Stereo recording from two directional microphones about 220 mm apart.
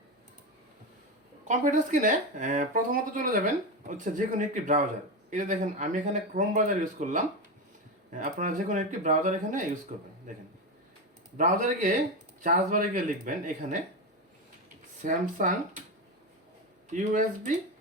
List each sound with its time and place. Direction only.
1.5 s speech: 35° right (ahead or behind)
15.0 s speech: 35° right (ahead or behind)
16.9 s speech: 35° right (ahead or behind)